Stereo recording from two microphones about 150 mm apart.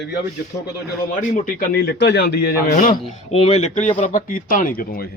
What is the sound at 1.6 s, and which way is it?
A man's voice, 90° left.